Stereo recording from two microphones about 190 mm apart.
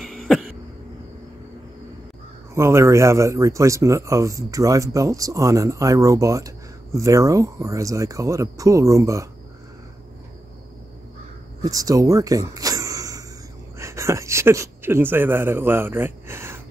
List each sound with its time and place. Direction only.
0.0 s a sound: centre (ahead or behind)
2.5 s speech: 15° right (ahead or behind)
11.6 s speech: 20° right (ahead or behind)